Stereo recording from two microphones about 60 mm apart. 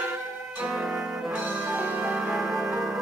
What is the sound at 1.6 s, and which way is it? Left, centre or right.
Music, right.